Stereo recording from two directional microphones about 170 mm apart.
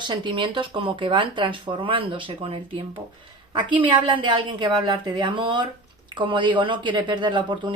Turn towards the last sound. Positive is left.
turn(degrees=-25)  # may be behind; listen again after turning